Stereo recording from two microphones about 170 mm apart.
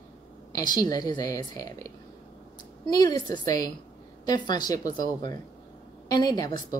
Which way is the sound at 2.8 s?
25° left (ahead or behind).